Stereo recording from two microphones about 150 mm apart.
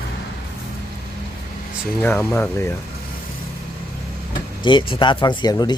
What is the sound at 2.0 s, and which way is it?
Speech, 15° left (ahead or behind).